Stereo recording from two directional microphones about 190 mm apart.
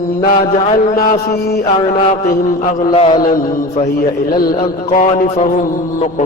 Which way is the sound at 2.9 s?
30° left (ahead or behind).